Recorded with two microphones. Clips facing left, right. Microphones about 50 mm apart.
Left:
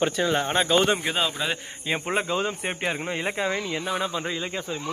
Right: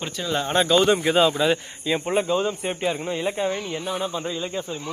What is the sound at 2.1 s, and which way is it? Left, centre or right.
Speech, left.